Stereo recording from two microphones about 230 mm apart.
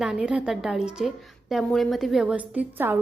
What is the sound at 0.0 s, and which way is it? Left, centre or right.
A woman's voice, centre.